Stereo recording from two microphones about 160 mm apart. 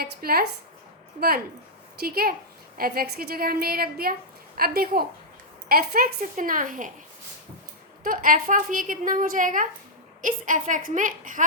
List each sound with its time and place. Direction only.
0.0 s a woman's voice: 70° right (ahead or behind)
2.0 s a woman's voice: 70° right (ahead or behind)
8.0 s a woman's voice: 60° right (ahead or behind)